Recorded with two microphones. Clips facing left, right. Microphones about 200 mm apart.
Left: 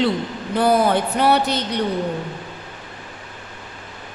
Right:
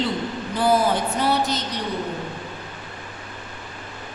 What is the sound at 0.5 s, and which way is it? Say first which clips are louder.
A woman's voice: left 3 dB; 60° left (ahead or behind).